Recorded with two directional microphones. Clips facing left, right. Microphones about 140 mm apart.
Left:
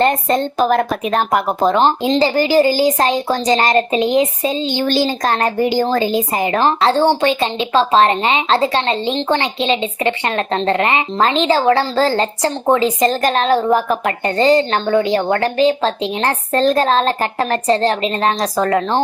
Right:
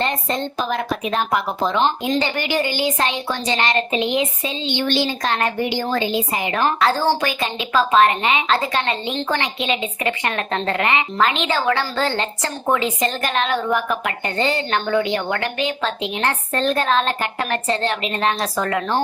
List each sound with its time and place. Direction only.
0.0 s speech: 50° left (ahead or behind)
2.0 s a woman's voice: 35° left (ahead or behind)